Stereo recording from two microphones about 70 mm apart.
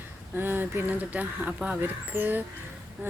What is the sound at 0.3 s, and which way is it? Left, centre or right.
Speech, right.